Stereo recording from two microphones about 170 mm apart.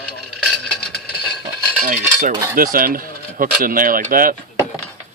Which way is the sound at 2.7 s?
55° right (ahead or behind).